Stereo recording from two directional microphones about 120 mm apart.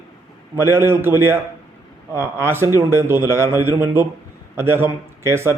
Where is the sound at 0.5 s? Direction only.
20° right (ahead or behind).